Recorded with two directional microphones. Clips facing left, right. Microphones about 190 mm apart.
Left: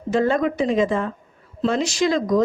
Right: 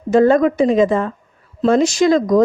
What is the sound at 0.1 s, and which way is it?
A woman's voice, 45° right (ahead or behind).